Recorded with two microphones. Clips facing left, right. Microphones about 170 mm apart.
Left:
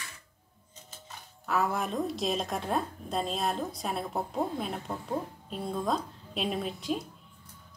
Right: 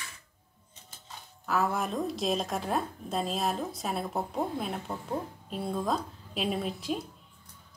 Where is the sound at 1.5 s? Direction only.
Centre (ahead or behind).